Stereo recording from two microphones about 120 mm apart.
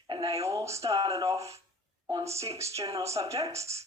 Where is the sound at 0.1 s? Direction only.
30° right (ahead or behind).